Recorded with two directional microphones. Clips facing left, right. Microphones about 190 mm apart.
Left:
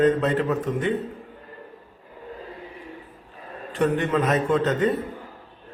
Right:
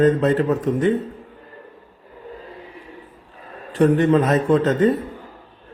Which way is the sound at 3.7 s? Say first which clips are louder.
Right 7 dB; 35° right (ahead or behind).